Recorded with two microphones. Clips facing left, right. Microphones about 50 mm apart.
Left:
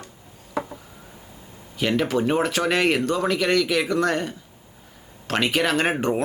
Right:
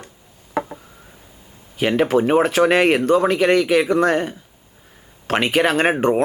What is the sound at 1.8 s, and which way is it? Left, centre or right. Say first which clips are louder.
Speech: right 5 dB; right.